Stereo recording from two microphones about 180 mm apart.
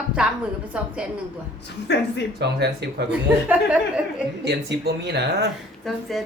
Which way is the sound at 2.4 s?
65° right (ahead or behind).